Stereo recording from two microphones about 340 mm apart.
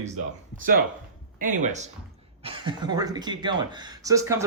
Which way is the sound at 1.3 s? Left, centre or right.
Right.